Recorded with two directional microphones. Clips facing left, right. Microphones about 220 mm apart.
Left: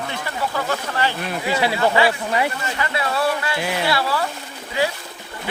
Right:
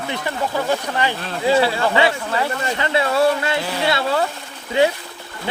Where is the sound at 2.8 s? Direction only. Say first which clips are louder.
Right 5 dB; 25° right (ahead or behind).